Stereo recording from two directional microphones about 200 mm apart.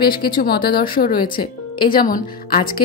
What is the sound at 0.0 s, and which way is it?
A woman's voice, 50° left (ahead or behind).